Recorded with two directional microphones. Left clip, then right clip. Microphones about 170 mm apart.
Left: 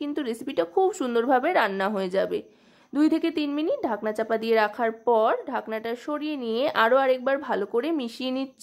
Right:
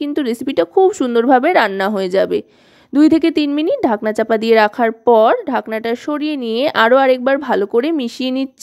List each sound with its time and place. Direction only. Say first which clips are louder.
0.0 s a woman's voice: right 11 dB; 40° right (ahead or behind)